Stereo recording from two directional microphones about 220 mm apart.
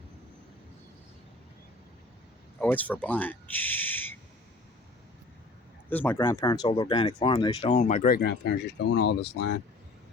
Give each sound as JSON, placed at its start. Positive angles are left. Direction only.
{"t": 2.6, "sound": "speech", "side_deg": 5}
{"t": 5.9, "sound": "speech", "side_deg": 10}